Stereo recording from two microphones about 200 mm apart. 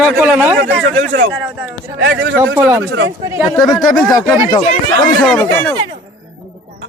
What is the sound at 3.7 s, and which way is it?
Speech, centre (ahead or behind).